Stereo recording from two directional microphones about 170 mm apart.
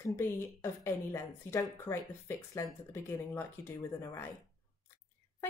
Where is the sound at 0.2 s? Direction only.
15° left (ahead or behind).